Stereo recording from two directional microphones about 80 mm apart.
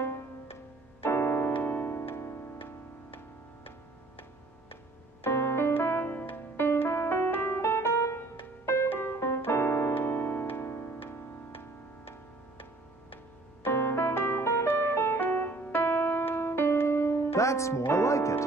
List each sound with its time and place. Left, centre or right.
1.0 s keyboard: left
1.6 s music: left
5.2 s piano: left
13.7 s music: left